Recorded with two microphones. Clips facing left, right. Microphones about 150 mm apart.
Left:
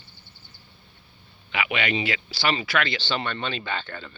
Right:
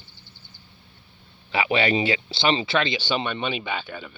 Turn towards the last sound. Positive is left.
turn(degrees=-10)  # may be behind; listen again after turning